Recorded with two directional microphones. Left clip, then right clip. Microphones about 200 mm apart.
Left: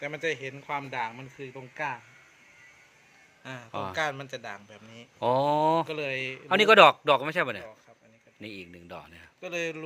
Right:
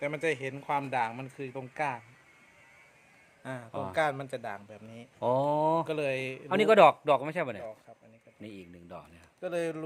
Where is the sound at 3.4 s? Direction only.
40° right (ahead or behind).